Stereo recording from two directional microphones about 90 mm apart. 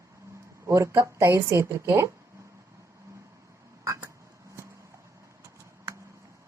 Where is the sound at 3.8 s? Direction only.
40° right (ahead or behind).